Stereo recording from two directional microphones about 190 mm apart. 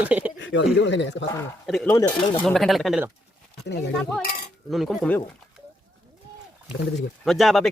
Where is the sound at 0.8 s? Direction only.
70° left (ahead or behind).